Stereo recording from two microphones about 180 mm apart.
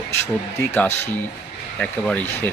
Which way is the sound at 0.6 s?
15° left (ahead or behind).